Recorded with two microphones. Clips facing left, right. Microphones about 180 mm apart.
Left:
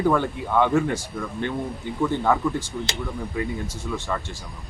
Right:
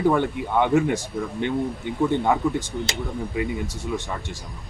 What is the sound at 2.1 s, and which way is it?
Speech, 20° right (ahead or behind).